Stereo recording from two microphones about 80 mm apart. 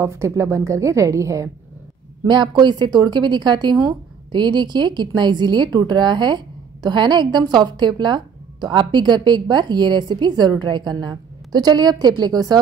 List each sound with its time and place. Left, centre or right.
0.0 s a woman's voice: right
2.2 s a woman's voice: right